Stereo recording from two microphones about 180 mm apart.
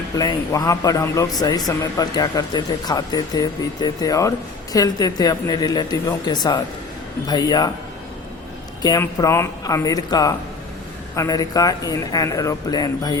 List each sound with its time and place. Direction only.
0.2 s a man's voice: 20° left (ahead or behind)
8.8 s a man's voice: 20° left (ahead or behind)